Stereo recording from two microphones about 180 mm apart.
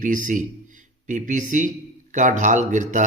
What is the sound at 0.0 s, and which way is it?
Speech, 45° right (ahead or behind).